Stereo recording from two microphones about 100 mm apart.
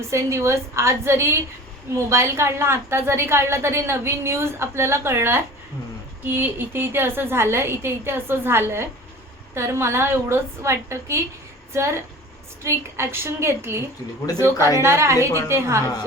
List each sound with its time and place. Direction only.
0.1 s a woman's voice: 30° right (ahead or behind)